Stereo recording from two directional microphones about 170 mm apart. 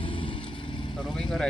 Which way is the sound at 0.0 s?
30° left (ahead or behind).